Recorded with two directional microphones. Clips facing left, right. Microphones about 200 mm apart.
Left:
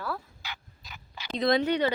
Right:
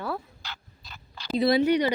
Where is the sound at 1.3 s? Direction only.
5° right (ahead or behind).